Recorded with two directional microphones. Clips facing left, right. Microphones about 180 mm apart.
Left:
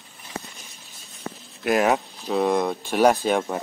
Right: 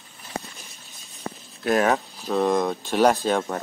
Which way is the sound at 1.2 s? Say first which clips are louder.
Right 1 dB; 35° right (ahead or behind).